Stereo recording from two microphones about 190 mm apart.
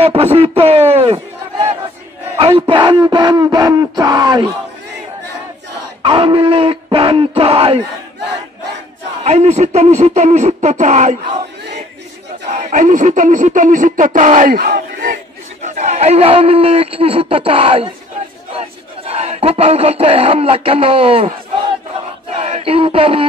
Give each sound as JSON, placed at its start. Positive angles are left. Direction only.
{"t": 0.0, "sound": "speech", "side_deg": -30}
{"t": 2.3, "sound": "speech", "side_deg": -30}
{"t": 6.0, "sound": "speech", "side_deg": -25}
{"t": 9.2, "sound": "speech", "side_deg": -35}
{"t": 12.4, "sound": "speech", "side_deg": -40}
{"t": 22.3, "sound": "a sound", "side_deg": -35}